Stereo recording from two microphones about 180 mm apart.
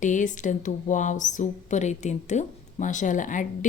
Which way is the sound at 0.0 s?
45° left (ahead or behind).